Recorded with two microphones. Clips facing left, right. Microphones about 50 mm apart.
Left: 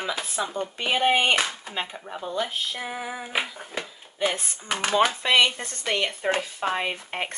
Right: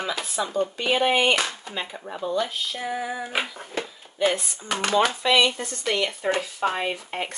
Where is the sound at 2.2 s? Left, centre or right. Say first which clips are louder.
Right 3 dB; centre.